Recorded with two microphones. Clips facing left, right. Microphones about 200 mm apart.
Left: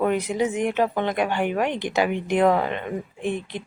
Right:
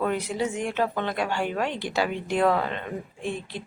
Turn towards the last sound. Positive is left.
turn(degrees=20)  # may be behind; listen again after turning